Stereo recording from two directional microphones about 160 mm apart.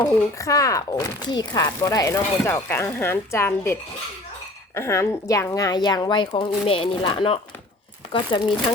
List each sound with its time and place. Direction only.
0.0 s speech: 20° left (ahead or behind)